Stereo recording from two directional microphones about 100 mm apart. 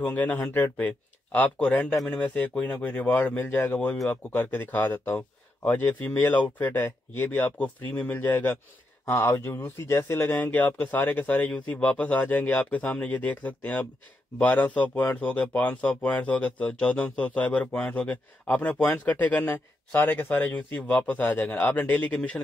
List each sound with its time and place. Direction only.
0.0 s speech: 15° left (ahead or behind)